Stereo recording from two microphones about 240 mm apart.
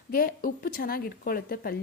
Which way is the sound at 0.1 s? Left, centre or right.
Left.